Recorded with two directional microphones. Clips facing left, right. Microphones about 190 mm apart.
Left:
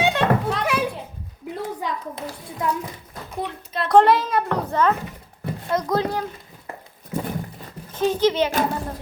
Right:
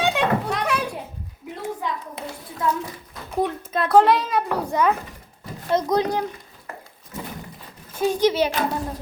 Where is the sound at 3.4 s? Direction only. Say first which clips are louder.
Right 5 dB; 45° right (ahead or behind).